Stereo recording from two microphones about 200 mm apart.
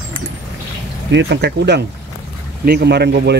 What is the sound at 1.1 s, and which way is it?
Speech, 60° right (ahead or behind).